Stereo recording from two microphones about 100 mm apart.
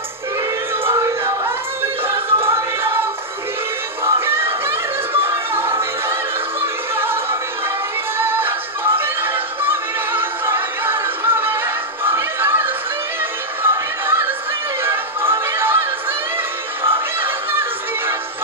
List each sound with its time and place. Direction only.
0.8 s music: 30° right (ahead or behind)
4.0 s music: 25° right (ahead or behind)
8.2 s singing: 20° right (ahead or behind)
13.6 s music: 25° right (ahead or behind)